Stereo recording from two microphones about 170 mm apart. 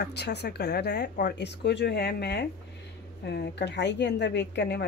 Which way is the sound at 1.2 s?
90° left.